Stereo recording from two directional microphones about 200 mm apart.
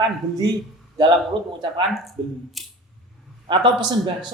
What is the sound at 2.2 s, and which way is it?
Speech, 25° right (ahead or behind).